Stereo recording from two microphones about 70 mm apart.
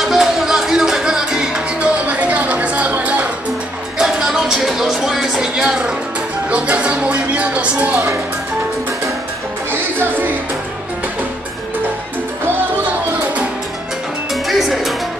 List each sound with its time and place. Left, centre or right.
0.0 s music: centre
4.0 s music: centre
9.7 s music: right
14.3 s music: centre